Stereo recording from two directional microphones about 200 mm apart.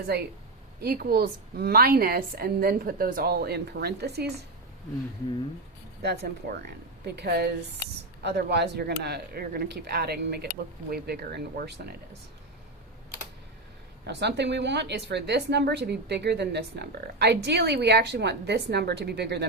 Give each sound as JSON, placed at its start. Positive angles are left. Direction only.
{"t": 0.8, "sound": "a woman's voice", "side_deg": -50}
{"t": 6.0, "sound": "a woman's voice", "side_deg": -55}
{"t": 14.1, "sound": "speech", "side_deg": -60}